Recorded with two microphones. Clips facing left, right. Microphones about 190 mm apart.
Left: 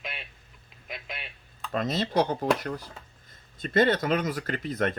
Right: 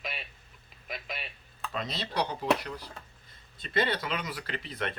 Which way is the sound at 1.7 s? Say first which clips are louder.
Left 8 dB; 50° left (ahead or behind).